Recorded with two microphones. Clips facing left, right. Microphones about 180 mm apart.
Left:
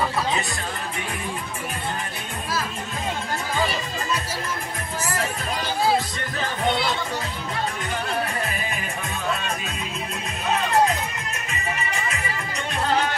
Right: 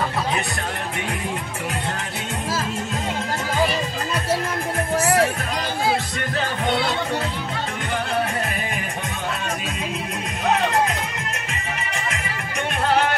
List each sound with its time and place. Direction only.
4.9 s music: 75° right (ahead or behind)